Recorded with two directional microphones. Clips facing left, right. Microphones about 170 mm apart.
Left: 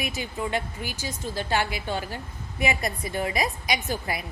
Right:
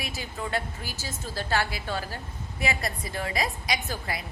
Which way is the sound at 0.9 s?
15° left (ahead or behind).